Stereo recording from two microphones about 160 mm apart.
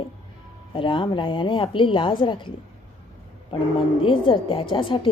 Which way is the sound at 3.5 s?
35° left (ahead or behind).